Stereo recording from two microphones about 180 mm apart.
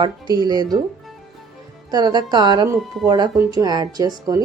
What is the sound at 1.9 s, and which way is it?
Speech, 20° right (ahead or behind).